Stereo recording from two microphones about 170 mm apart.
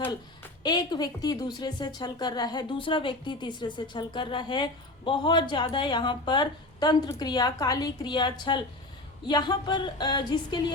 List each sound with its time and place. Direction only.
0.6 s a woman's voice: 25° left (ahead or behind)